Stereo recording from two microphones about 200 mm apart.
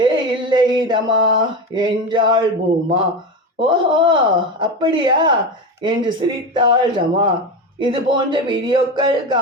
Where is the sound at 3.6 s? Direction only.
25° right (ahead or behind).